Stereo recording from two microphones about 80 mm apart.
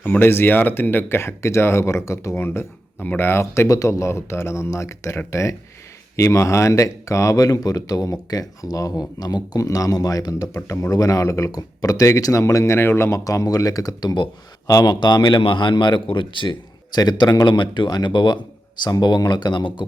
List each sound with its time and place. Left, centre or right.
0.0 s speech: left
3.7 s a man's voice: left
17.5 s a man's voice: left